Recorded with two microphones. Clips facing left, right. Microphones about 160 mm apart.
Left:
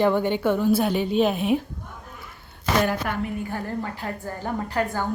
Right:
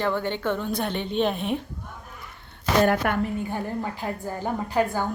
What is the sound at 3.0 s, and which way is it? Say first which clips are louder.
Speech: right 4 dB; 60° right (ahead or behind).